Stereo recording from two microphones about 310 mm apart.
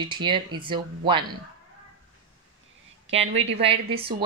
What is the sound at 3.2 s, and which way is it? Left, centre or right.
Speech, centre.